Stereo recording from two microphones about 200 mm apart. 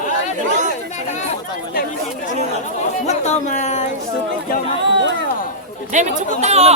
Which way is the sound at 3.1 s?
35° left (ahead or behind).